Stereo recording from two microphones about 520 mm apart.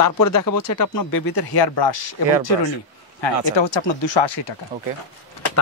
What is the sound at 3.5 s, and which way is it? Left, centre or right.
Speech, left.